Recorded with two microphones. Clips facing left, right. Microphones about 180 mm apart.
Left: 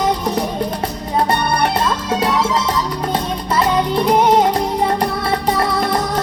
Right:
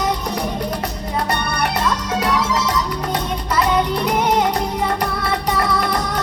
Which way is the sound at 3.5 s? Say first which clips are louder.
Left 2 dB; 30° left (ahead or behind).